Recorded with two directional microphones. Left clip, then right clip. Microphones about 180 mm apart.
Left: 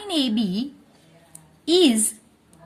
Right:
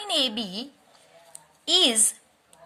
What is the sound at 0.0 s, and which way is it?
Speech, 20° right (ahead or behind).